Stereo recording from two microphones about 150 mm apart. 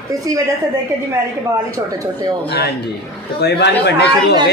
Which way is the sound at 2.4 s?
90° left.